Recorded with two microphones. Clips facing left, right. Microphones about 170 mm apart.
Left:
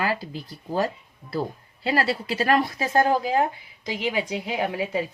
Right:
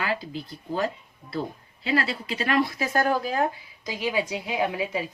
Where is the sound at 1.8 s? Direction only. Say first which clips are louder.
Left 2 dB; 40° left (ahead or behind); by 3.5 s 20° left (ahead or behind).